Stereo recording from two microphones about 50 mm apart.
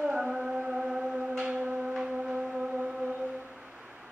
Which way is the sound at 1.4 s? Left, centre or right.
Right.